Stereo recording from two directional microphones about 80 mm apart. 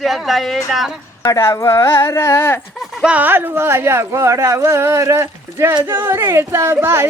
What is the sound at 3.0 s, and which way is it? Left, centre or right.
A woman's voice, right.